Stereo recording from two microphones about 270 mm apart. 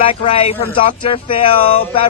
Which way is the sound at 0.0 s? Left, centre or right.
Centre.